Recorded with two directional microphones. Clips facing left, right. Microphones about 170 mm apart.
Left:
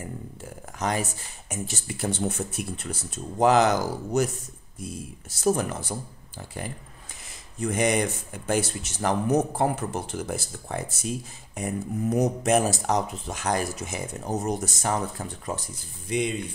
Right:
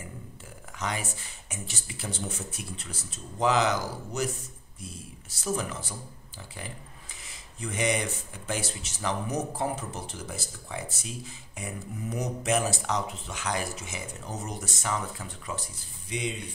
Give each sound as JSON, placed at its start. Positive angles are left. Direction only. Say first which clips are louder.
{"t": 0.7, "sound": "speech", "louder": "left 6 dB", "side_deg": 40}
{"t": 5.4, "sound": "speech", "louder": "left 7 dB", "side_deg": 45}
{"t": 7.6, "sound": "speech", "louder": "left 5 dB", "side_deg": 45}